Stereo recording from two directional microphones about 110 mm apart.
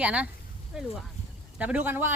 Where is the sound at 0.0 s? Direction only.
10° right (ahead or behind).